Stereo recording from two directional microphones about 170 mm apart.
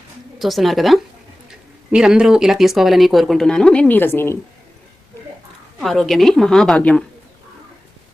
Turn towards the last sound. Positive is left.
turn(degrees=5)  # may be behind; listen again after turning